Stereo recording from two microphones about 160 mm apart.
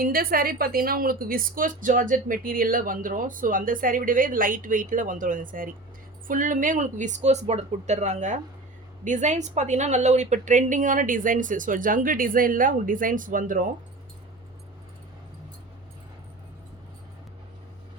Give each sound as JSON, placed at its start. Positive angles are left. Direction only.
{"t": 0.0, "sound": "a woman's voice", "side_deg": -65}